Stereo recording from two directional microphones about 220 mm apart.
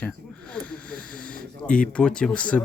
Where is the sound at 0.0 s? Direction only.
5° left (ahead or behind).